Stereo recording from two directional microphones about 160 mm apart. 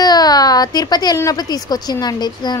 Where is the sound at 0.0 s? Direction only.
25° left (ahead or behind).